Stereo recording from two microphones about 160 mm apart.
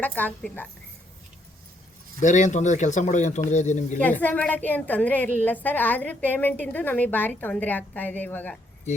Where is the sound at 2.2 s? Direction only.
50° left (ahead or behind).